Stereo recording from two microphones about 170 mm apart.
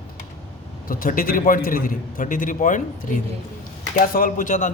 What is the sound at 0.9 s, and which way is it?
A man's voice, 55° left (ahead or behind).